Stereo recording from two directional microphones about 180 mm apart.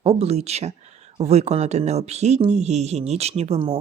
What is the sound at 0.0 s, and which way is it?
Speech, 35° right (ahead or behind).